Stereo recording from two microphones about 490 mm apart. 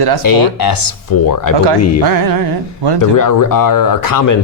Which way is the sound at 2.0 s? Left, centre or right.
Right.